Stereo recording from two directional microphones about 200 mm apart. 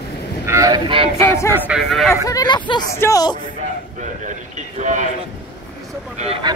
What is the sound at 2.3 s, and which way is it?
Speech, 20° left (ahead or behind).